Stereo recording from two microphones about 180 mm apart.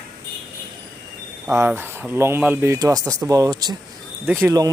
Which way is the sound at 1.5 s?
10° right (ahead or behind).